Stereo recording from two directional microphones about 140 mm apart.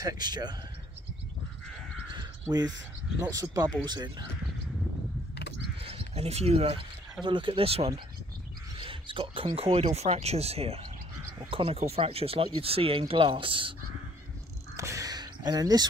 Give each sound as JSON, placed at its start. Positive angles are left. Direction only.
{"t": 0.0, "sound": "speech", "side_deg": -30}
{"t": 2.1, "sound": "crow", "side_deg": -30}
{"t": 3.5, "sound": "speech", "side_deg": -30}
{"t": 5.8, "sound": "speech", "side_deg": -45}
{"t": 14.8, "sound": "a sound", "side_deg": -20}